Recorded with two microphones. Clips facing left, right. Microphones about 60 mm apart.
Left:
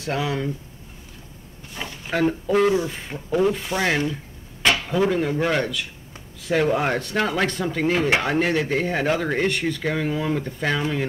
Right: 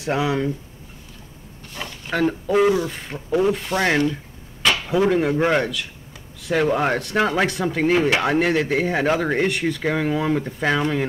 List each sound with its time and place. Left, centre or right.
0.0 s speech: centre
1.8 s a sound: centre
2.4 s speech: centre
2.7 s speech: centre
3.3 s speech: centre
6.7 s speech: centre